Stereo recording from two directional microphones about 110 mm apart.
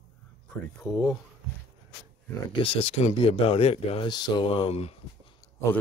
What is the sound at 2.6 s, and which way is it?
Speech, 60° left (ahead or behind).